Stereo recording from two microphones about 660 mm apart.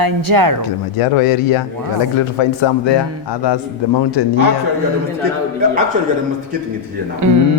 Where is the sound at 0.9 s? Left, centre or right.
Left.